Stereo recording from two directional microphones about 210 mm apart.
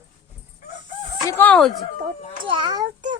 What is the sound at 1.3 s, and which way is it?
Speech, 10° left (ahead or behind).